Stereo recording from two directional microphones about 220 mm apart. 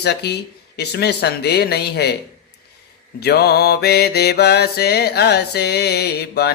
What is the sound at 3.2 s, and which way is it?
Mantra, 45° left (ahead or behind).